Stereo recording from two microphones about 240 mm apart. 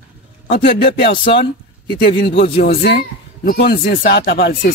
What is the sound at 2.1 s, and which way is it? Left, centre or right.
Speech, left.